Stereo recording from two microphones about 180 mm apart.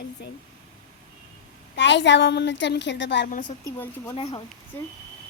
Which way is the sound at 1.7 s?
80° left.